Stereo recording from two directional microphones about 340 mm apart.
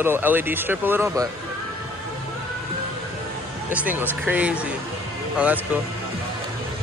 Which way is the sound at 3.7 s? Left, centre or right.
Centre.